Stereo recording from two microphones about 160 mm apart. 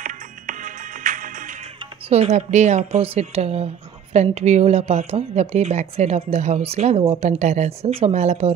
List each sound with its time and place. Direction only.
0.0 s music: 55° right (ahead or behind)
2.0 s a woman's voice: 40° right (ahead or behind)